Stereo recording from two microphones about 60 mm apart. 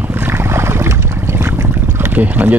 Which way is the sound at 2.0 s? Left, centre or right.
Right.